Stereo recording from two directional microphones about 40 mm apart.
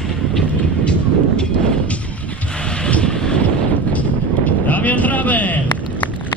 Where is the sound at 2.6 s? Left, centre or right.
Left.